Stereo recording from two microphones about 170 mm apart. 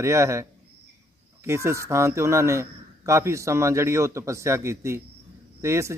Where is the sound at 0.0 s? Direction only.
15° right (ahead or behind).